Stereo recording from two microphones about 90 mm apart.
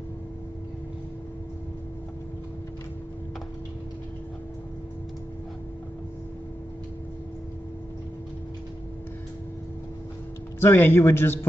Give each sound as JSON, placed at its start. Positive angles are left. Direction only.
{"t": 10.6, "sound": "a man's voice", "side_deg": 25}